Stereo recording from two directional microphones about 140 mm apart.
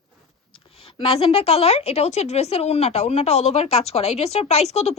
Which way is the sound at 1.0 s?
45° left (ahead or behind).